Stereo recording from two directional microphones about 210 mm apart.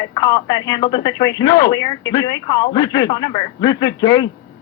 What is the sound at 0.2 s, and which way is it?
Speech, 20° left (ahead or behind).